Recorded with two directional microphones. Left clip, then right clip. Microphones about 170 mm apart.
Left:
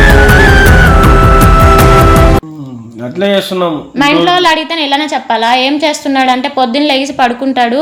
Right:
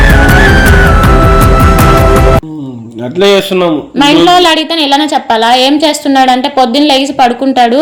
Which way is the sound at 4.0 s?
15° right (ahead or behind).